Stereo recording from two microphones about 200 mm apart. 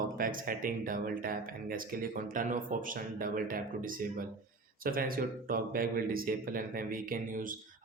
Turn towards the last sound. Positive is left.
turn(degrees=-45)  # may be behind; listen again after turning